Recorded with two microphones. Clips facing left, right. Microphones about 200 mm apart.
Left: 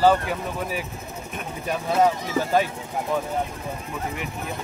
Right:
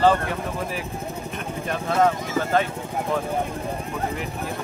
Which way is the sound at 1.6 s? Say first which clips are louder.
Even; 10° left (ahead or behind).